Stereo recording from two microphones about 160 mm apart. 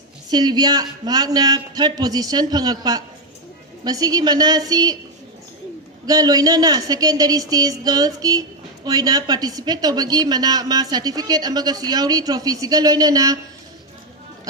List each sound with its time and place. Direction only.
0.3 s speech: 25° right (ahead or behind)
6.1 s speech: 25° right (ahead or behind)